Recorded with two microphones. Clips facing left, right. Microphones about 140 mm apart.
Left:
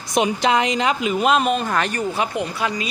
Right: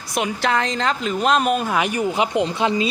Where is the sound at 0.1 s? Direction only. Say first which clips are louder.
Left 3 dB; 20° left (ahead or behind).